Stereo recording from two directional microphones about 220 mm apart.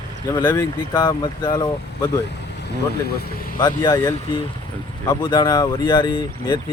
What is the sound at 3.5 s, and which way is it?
Speech, 20° left (ahead or behind).